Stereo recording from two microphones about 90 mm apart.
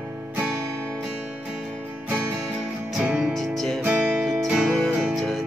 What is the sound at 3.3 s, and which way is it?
Music, 5° left (ahead or behind).